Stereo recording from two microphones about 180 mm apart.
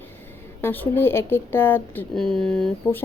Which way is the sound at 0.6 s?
10° left (ahead or behind).